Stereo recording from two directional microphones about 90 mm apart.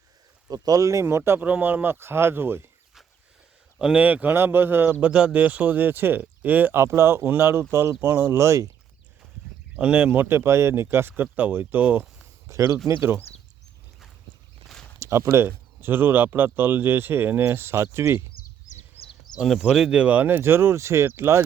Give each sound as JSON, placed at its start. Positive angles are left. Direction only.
{"t": 0.5, "sound": "speech", "side_deg": -45}
{"t": 3.8, "sound": "speech", "side_deg": -15}
{"t": 9.7, "sound": "speech", "side_deg": -15}
{"t": 12.5, "sound": "speech", "side_deg": -35}
{"t": 14.9, "sound": "speech", "side_deg": -35}
{"t": 19.4, "sound": "speech", "side_deg": -10}